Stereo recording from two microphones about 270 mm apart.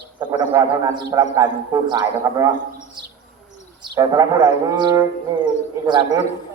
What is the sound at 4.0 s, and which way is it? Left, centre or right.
A man's voice, centre.